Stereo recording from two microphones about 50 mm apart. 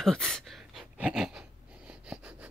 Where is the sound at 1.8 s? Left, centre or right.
Right.